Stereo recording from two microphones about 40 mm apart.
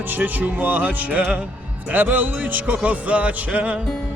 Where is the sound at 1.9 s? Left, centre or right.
Right.